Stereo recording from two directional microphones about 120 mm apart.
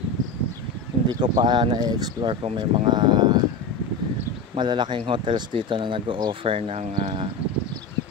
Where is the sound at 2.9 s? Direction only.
35° right (ahead or behind).